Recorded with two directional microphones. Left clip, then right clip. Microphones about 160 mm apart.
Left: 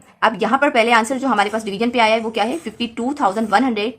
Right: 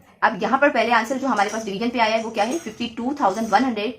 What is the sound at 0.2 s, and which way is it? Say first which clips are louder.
A woman's voice: left 2 dB; 45° left (ahead or behind).